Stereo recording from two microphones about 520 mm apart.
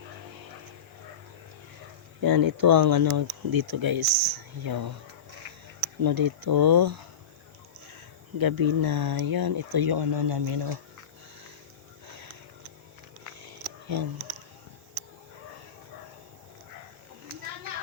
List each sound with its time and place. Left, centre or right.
2.2 s speech: right
6.0 s speech: right
8.4 s speech: right
12.0 s a sound: right